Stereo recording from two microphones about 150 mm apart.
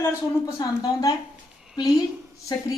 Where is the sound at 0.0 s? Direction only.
25° left (ahead or behind).